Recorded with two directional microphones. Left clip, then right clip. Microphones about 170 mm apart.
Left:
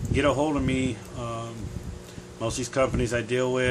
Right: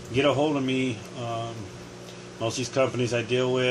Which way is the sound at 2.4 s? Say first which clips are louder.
Even; 20° left (ahead or behind).